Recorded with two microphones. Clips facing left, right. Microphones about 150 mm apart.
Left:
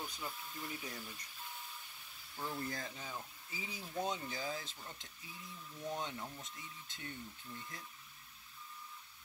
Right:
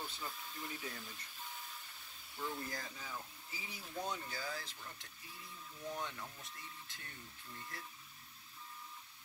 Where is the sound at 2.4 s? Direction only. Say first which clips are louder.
Left 2 dB; 25° left (ahead or behind).